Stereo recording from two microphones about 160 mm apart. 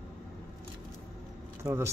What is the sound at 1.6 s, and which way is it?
Speech, 15° right (ahead or behind).